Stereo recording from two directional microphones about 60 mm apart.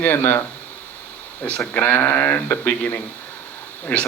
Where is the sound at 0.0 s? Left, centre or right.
Left.